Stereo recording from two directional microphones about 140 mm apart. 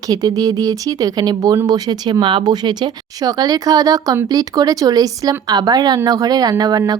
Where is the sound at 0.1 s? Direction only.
25° right (ahead or behind).